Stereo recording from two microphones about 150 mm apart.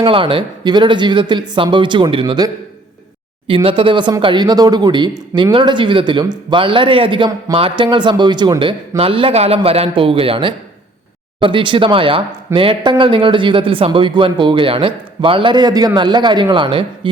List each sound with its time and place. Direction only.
0.0 s speech: 35° right (ahead or behind)